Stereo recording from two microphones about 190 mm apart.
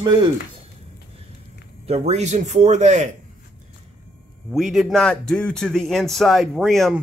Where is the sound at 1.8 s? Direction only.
35° right (ahead or behind).